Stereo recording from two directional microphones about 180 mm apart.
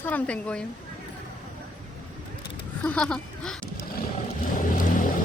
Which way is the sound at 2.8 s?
5° left (ahead or behind).